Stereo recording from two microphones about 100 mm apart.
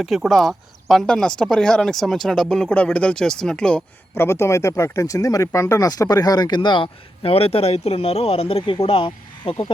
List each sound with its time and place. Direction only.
0.0 s speech: centre (ahead or behind)
4.1 s speech: 25° left (ahead or behind); by 9.7 s 60° left (ahead or behind)